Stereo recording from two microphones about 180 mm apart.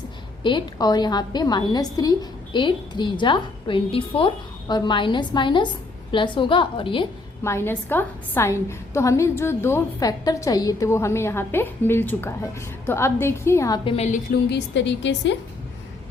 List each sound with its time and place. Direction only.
0.4 s a woman's voice: 25° left (ahead or behind)
7.4 s a woman's voice: 15° left (ahead or behind)
13.9 s a woman's voice: 35° left (ahead or behind)
14.5 s a woman's voice: 85° left